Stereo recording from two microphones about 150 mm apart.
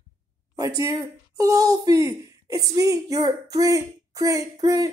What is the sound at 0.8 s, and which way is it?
A woman's voice, 20° right (ahead or behind).